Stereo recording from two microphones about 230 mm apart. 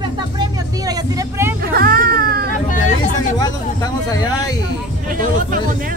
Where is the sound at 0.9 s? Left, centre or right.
Centre.